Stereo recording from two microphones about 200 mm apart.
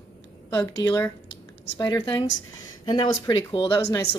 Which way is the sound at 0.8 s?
15° left (ahead or behind).